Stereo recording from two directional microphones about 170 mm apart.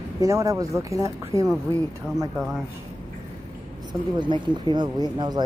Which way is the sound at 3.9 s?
25° right (ahead or behind).